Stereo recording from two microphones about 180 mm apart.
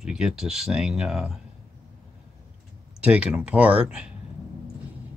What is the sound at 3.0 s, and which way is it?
Speech, 5° right (ahead or behind).